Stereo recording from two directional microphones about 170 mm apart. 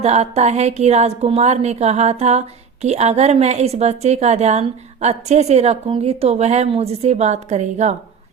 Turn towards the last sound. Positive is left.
turn(degrees=-45)  # may be behind; listen again after turning